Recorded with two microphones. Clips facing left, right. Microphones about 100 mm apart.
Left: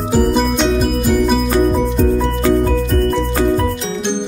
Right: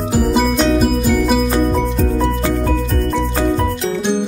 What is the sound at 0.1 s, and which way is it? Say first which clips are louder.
Music: left 1 dB; centre (ahead or behind).